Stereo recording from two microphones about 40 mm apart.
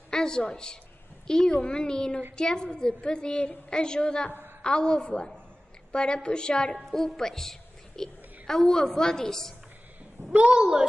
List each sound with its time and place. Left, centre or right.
0.1 s a sound: centre
0.4 s a woman's voice: left
6.9 s a woman's voice: centre
10.3 s a child's voice: right